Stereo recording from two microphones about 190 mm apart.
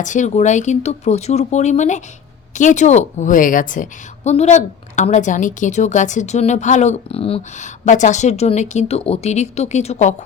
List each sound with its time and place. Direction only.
0.0 s a woman's voice: 40° left (ahead or behind)